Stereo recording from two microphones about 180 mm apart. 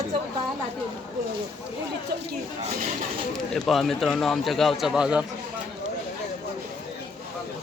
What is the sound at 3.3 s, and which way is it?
Speech, 5° left (ahead or behind).